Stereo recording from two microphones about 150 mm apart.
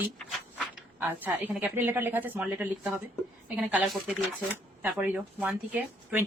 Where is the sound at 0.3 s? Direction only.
Centre (ahead or behind).